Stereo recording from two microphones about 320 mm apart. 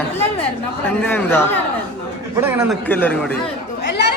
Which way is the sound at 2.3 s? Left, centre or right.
Centre.